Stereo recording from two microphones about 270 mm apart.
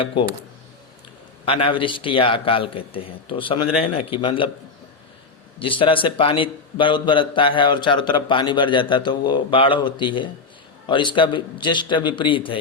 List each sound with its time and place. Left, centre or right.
1.5 s a man's voice: centre
5.5 s a man's voice: centre